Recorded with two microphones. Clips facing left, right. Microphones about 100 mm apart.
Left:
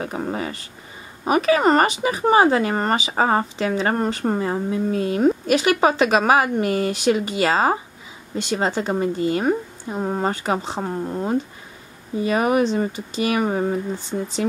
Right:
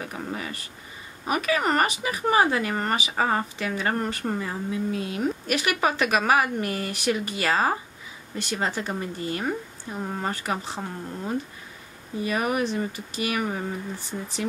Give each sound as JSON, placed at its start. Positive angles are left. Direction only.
{"t": 0.0, "sound": "speech", "side_deg": 35}
{"t": 5.6, "sound": "speech", "side_deg": 30}